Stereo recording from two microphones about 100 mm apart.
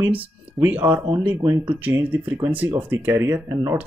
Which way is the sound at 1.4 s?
25° right (ahead or behind).